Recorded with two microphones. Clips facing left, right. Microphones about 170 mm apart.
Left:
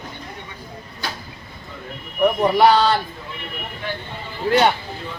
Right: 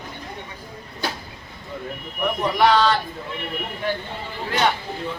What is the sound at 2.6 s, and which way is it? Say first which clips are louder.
Speech: left 2 dB; 35° left (ahead or behind).